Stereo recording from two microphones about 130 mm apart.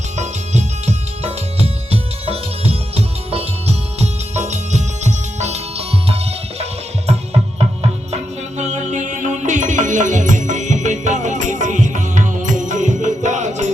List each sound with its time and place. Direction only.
0.2 s music: 60° right (ahead or behind)
7.6 s music: 55° right (ahead or behind)